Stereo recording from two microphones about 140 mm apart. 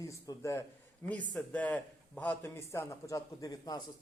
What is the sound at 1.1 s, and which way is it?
Speech, 10° left (ahead or behind).